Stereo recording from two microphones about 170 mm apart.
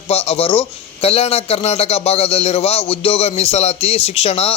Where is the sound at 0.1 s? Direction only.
35° left (ahead or behind).